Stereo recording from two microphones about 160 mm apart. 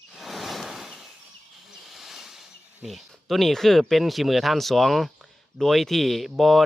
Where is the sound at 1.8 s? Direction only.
Centre (ahead or behind).